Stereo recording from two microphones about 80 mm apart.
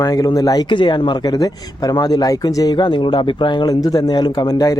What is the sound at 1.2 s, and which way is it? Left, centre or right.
Speech, left.